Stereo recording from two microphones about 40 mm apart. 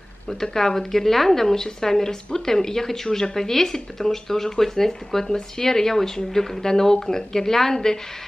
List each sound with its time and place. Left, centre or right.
0.3 s speech: centre